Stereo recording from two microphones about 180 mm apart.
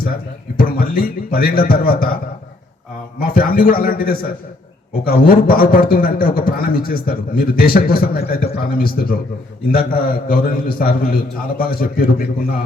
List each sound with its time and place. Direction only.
0.5 s a man's voice: 55° left (ahead or behind)
3.2 s a man's voice: 55° left (ahead or behind)